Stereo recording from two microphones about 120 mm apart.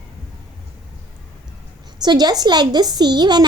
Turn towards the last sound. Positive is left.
turn(degrees=-40)  # may be behind; listen again after turning